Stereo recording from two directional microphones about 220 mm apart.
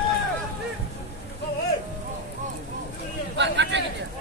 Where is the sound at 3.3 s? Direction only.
55° right (ahead or behind).